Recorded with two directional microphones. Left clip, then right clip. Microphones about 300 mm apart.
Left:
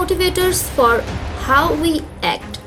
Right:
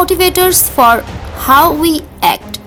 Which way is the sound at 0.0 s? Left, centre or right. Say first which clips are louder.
Right 7 dB; right.